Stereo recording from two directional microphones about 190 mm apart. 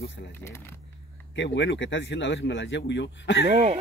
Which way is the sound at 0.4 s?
15° left (ahead or behind).